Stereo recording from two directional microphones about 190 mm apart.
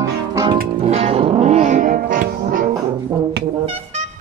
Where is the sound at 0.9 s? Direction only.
30° right (ahead or behind).